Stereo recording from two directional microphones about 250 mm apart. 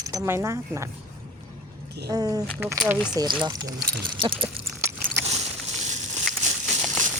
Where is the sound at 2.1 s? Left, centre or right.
Centre.